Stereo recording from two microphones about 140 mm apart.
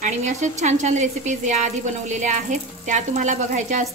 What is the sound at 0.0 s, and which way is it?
A woman's voice, 55° right (ahead or behind).